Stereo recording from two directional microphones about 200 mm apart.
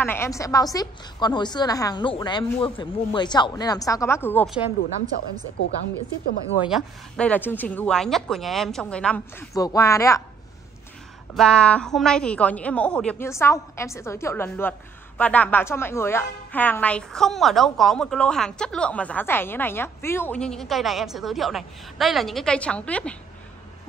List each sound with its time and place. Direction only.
0.0 s a woman's voice: 10° left (ahead or behind)
6.7 s speech: 5° left (ahead or behind)
11.3 s a woman's voice: 5° left (ahead or behind)